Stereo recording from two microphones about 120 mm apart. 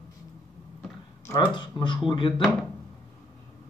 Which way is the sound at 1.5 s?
40° left (ahead or behind).